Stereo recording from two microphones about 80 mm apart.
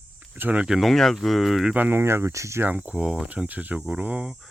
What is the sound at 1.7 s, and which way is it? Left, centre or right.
Speech, right.